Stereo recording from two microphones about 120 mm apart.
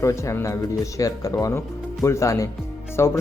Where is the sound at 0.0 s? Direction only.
25° left (ahead or behind).